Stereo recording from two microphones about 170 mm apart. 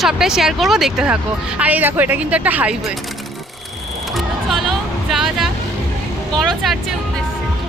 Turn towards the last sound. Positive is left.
turn(degrees=0)  # may be behind; listen again after turning